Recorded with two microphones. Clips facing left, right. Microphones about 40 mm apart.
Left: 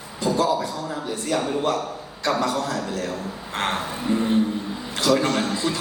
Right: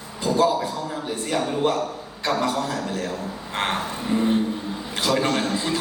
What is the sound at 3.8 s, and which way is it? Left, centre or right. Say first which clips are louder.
Speech: even; centre.